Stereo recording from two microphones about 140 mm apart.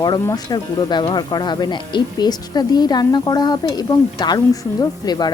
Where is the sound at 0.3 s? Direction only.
30° left (ahead or behind).